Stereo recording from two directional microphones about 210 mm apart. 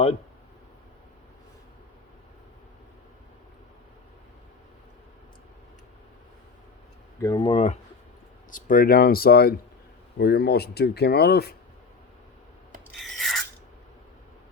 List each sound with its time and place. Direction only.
7.2 s speech: 20° left (ahead or behind)
8.4 s speech: 40° left (ahead or behind)
12.9 s rub: centre (ahead or behind)